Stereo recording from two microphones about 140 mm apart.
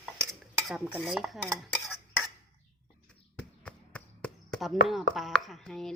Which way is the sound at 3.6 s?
10° left (ahead or behind).